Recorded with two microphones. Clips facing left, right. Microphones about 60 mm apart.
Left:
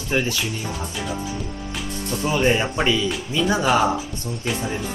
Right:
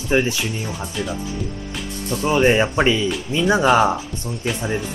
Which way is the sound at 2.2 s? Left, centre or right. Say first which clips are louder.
Right 4 dB; right.